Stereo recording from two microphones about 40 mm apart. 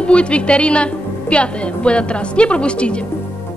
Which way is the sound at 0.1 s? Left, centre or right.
Left.